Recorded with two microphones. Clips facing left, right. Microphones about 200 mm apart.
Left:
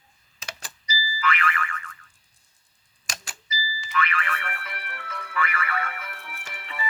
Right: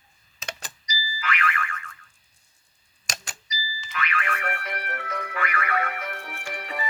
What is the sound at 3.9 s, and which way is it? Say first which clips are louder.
Music: left 2 dB; 45° right (ahead or behind).